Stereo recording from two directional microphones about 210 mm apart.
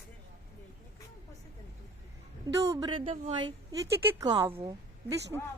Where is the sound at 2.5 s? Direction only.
15° right (ahead or behind).